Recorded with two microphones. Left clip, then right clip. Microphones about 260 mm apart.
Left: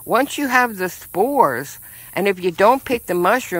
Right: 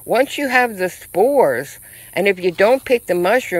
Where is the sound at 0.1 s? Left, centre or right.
Centre.